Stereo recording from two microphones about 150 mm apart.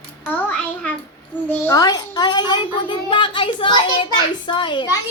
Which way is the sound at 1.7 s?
25° left (ahead or behind).